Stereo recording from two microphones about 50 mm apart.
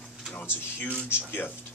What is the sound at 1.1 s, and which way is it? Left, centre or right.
Speech, left.